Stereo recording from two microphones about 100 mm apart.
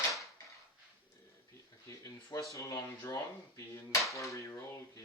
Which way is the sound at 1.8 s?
35° left (ahead or behind).